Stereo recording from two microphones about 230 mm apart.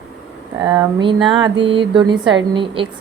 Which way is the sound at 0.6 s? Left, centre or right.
Centre.